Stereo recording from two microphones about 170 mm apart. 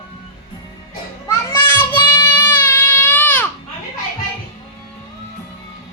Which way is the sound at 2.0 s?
25° left (ahead or behind).